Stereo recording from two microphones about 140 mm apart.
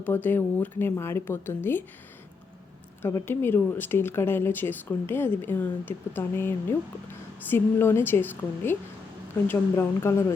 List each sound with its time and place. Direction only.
0.0 s speech: 10° left (ahead or behind)
3.0 s speech: 15° left (ahead or behind)